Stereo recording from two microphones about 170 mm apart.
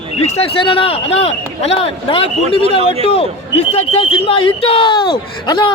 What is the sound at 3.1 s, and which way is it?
Speech, 35° left (ahead or behind).